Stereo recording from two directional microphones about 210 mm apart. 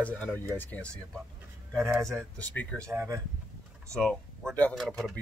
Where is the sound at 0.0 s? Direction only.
10° left (ahead or behind).